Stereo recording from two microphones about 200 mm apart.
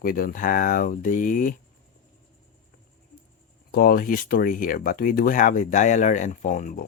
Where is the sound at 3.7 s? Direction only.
50° left (ahead or behind).